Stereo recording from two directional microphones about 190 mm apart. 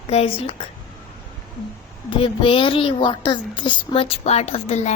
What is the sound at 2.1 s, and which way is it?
Speech, 30° left (ahead or behind).